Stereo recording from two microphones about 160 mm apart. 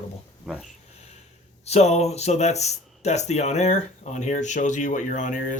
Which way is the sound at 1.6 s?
40° left (ahead or behind).